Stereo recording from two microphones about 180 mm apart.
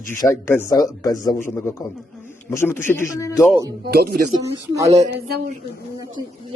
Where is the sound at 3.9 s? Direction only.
60° right (ahead or behind).